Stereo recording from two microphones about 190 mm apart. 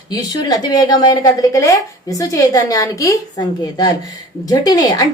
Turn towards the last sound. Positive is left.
turn(degrees=20)  # may be behind; listen again after turning